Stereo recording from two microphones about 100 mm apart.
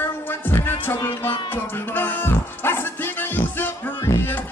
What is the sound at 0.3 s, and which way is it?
Music, 20° left (ahead or behind).